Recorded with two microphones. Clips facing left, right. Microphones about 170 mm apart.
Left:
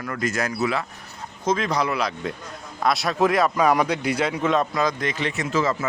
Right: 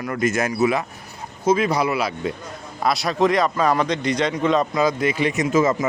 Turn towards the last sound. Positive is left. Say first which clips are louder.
# right 5 dB
turn(degrees=-20)  # may be behind; listen again after turning